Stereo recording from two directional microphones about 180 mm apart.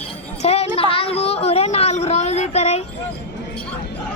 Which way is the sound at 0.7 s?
30° left (ahead or behind).